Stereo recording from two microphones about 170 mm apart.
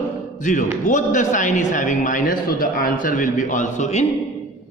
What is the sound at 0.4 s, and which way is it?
A man's voice, 50° left (ahead or behind).